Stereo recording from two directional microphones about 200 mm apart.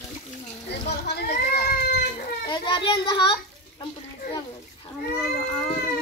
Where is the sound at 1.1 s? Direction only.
55° left (ahead or behind).